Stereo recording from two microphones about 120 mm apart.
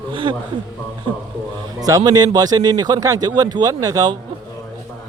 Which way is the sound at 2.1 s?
30° right (ahead or behind).